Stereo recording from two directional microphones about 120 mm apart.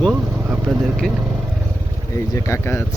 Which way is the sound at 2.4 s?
25° left (ahead or behind).